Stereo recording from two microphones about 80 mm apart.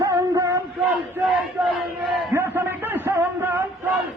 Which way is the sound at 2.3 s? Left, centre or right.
Right.